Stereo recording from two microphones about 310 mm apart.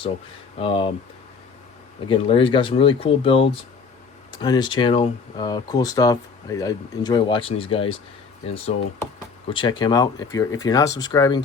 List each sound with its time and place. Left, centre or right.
0.6 s speech: centre
2.0 s speech: centre